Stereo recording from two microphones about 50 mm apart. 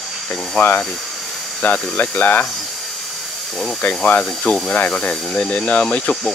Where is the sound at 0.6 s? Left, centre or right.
Centre.